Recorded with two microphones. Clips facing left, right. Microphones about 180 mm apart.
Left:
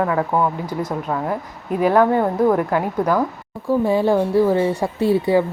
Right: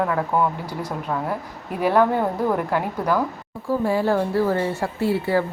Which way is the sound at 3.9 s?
15° left (ahead or behind).